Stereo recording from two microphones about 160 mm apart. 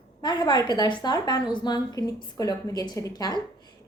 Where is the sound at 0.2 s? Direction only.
25° left (ahead or behind).